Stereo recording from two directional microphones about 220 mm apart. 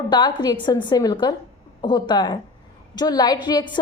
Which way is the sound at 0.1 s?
20° left (ahead or behind).